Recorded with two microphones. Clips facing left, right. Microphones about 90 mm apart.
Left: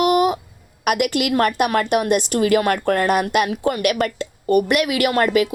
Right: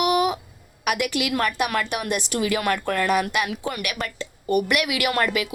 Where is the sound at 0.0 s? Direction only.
40° left (ahead or behind).